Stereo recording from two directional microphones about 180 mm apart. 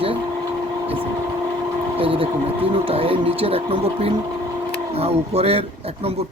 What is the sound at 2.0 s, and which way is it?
Speech, 30° right (ahead or behind).